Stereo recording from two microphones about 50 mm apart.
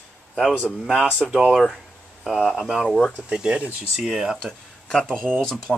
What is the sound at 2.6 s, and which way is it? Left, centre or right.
Speech, centre.